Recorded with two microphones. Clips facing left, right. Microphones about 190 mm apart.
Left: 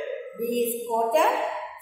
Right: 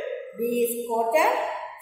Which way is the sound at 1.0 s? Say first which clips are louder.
Left 1 dB; centre (ahead or behind).